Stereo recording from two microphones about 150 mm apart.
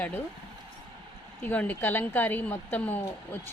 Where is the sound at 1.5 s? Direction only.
10° left (ahead or behind).